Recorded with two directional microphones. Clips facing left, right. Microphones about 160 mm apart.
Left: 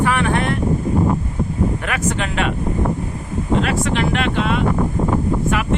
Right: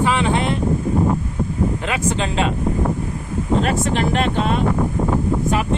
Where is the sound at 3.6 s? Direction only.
40° right (ahead or behind).